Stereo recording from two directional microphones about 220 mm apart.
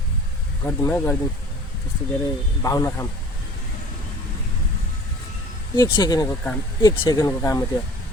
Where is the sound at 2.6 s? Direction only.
15° left (ahead or behind).